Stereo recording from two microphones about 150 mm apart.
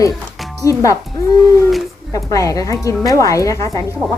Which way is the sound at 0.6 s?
20° left (ahead or behind).